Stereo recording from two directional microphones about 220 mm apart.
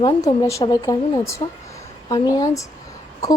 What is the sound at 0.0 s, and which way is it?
A woman's voice, 20° left (ahead or behind).